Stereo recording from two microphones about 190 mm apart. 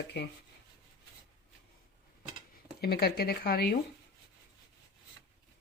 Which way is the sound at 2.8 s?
55° left (ahead or behind).